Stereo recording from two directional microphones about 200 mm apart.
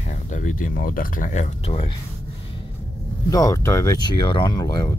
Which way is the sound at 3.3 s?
15° left (ahead or behind).